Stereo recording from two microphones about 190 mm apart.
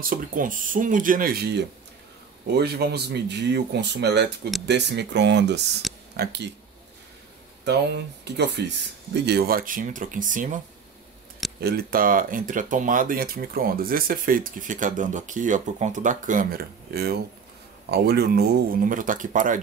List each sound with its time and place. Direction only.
0.0 s speech: 45° right (ahead or behind); by 5.6 s 65° right (ahead or behind)
5.8 s a sound: centre (ahead or behind)
7.6 s speech: 60° right (ahead or behind); by 10.6 s 45° right (ahead or behind)
11.6 s speech: 50° right (ahead or behind)